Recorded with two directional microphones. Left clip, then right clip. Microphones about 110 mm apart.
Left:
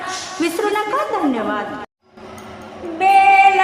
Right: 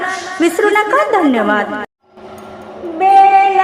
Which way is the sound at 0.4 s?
35° right (ahead or behind).